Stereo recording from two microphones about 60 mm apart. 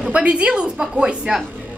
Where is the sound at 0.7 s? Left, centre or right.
Centre.